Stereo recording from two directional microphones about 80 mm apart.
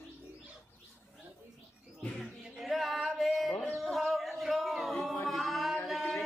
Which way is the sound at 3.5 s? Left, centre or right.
Left.